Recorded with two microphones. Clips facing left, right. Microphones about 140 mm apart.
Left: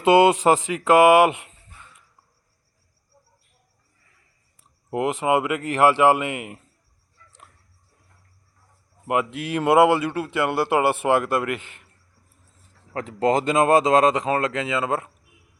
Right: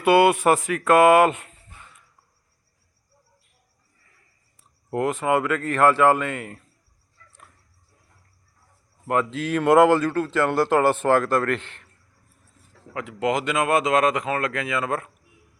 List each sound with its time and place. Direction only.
0.0 s speech: 20° left (ahead or behind)
4.9 s speech: 20° left (ahead or behind)
9.0 s speech: 15° left (ahead or behind)
12.9 s speech: 35° left (ahead or behind)